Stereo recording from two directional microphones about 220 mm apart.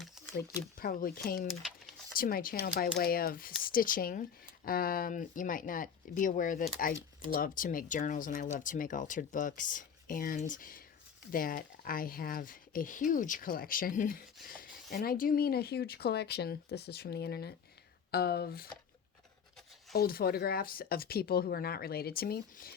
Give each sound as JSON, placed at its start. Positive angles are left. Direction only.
{"t": 0.3, "sound": "speech", "side_deg": 45}
{"t": 19.9, "sound": "speech", "side_deg": 45}